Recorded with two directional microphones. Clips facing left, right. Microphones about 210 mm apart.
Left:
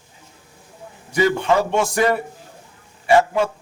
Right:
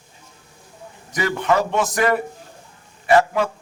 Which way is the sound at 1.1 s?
25° left (ahead or behind).